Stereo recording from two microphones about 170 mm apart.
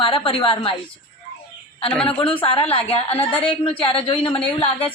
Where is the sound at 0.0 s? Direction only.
30° left (ahead or behind).